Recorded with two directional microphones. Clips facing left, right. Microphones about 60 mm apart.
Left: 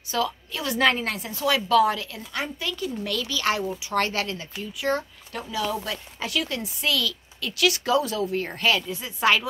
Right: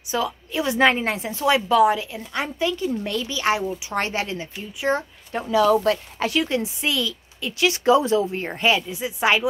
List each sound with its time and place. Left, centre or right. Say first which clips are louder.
0.1 s speech: right 2 dB; centre